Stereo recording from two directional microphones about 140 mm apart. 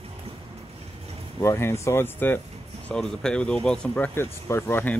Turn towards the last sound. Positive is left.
turn(degrees=15)  # may be behind; listen again after turning